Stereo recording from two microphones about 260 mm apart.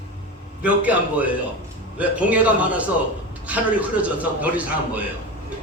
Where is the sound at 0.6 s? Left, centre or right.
Centre.